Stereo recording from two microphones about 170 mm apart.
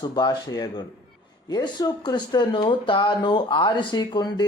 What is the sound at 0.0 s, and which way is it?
Speech, 25° left (ahead or behind).